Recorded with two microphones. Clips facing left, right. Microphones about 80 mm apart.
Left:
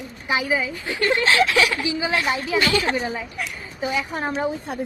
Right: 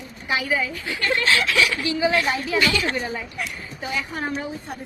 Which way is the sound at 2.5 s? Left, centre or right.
Left.